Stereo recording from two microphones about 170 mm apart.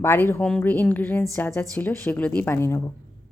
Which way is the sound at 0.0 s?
15° left (ahead or behind).